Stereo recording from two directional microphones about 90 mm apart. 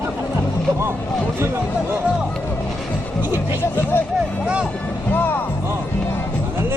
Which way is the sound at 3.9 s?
25° left (ahead or behind).